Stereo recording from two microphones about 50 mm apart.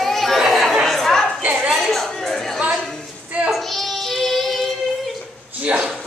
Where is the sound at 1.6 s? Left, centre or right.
Centre.